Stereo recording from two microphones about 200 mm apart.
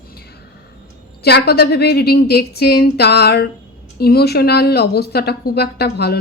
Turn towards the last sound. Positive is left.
turn(degrees=55)  # may be behind; listen again after turning